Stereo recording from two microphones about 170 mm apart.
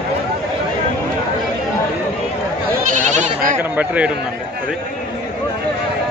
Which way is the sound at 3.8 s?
10° right (ahead or behind).